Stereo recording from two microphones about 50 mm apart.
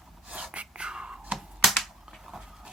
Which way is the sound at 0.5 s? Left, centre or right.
Right.